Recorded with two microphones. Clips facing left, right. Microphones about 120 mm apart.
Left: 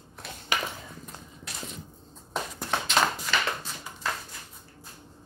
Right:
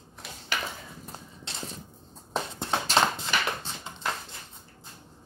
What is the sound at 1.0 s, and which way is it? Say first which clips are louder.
Clip-clop: right 1 dB; 30° right (ahead or behind).